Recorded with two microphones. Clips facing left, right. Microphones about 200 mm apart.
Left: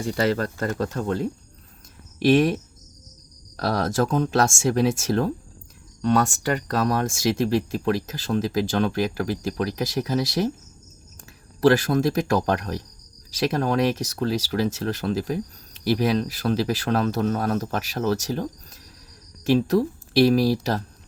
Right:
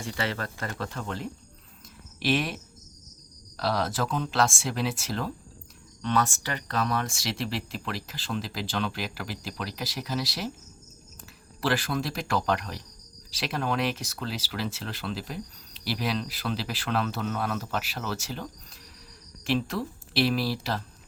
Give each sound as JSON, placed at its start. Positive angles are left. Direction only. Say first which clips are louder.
{"t": 0.0, "sound": "speech", "louder": "left 9 dB", "side_deg": 40}
{"t": 3.6, "sound": "speech", "louder": "left 5 dB", "side_deg": 50}
{"t": 11.6, "sound": "speech", "louder": "left 10 dB", "side_deg": 45}
{"t": 19.5, "sound": "speech", "louder": "left 9 dB", "side_deg": 40}